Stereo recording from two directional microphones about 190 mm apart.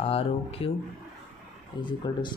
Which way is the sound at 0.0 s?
30° left (ahead or behind).